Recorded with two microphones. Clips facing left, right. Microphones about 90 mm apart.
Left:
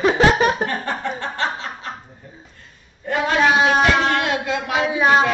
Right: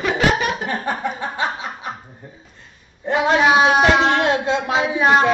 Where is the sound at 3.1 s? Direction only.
20° right (ahead or behind).